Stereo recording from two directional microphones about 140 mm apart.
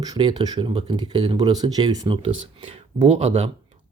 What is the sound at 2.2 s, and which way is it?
Speech, 45° right (ahead or behind).